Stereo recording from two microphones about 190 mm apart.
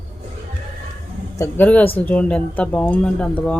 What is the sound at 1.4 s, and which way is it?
A man's voice, 10° left (ahead or behind).